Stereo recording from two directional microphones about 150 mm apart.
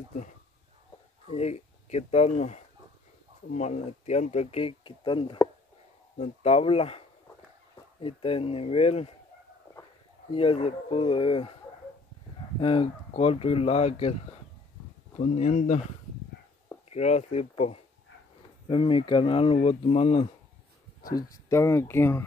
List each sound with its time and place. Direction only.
1.3 s speech: 45° left (ahead or behind)
6.1 s speech: 45° left (ahead or behind)
8.0 s speech: 35° left (ahead or behind)
9.7 s a sound: 15° left (ahead or behind)
10.3 s speech: 35° left (ahead or behind)
12.5 s speech: 35° left (ahead or behind)
15.1 s speech: 50° left (ahead or behind)
16.9 s speech: 45° left (ahead or behind)
21.1 s speech: 20° left (ahead or behind)